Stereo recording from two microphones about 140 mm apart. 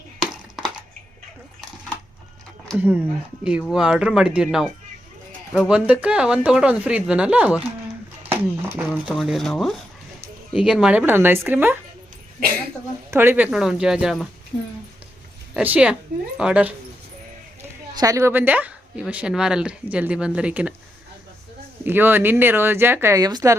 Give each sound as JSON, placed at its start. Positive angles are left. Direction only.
{"t": 0.6, "sound": "a sound", "side_deg": -5}
{"t": 2.7, "sound": "speech", "side_deg": -10}
{"t": 9.1, "sound": "speech", "side_deg": 0}
{"t": 13.1, "sound": "speech", "side_deg": -15}
{"t": 15.5, "sound": "speech", "side_deg": -10}
{"t": 17.6, "sound": "a woman's voice", "side_deg": -20}
{"t": 21.8, "sound": "speech", "side_deg": -15}